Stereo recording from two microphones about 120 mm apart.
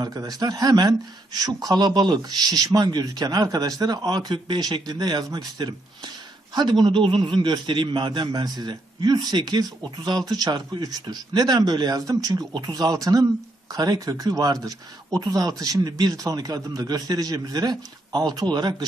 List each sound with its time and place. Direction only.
0.0 s a man's voice: 30° right (ahead or behind)